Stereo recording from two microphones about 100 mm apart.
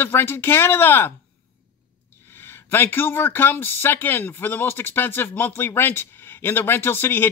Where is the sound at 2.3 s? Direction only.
20° left (ahead or behind).